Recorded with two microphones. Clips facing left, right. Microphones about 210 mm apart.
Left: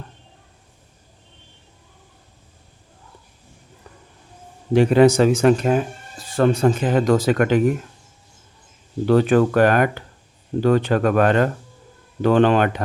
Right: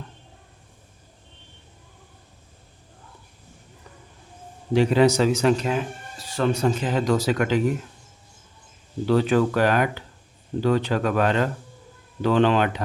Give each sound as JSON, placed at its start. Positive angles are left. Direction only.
{"t": 4.7, "sound": "speech", "side_deg": 55}
{"t": 9.0, "sound": "speech", "side_deg": 50}